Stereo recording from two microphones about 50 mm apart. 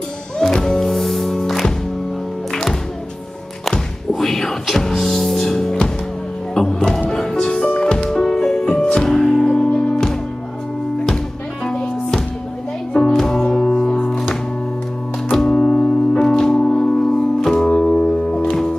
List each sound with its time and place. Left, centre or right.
0.4 s music: centre
4.1 s music: centre
11.7 s music: centre
15.3 s music: centre
17.9 s music: left